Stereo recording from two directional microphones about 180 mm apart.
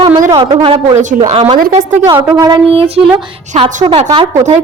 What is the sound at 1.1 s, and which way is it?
Speech, 35° right (ahead or behind).